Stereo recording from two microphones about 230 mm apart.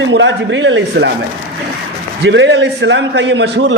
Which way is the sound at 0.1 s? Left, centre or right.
Right.